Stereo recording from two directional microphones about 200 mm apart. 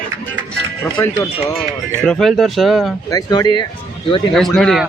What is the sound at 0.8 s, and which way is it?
Speech, 10° left (ahead or behind).